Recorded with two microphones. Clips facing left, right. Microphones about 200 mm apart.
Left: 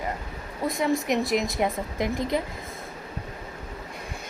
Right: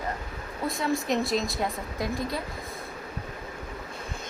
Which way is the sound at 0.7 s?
20° left (ahead or behind).